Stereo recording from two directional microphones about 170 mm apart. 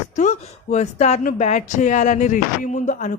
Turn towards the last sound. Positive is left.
turn(degrees=45)  # may be behind; listen again after turning